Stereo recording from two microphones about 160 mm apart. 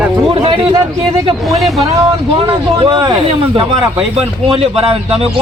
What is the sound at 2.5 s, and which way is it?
Speech, 25° right (ahead or behind).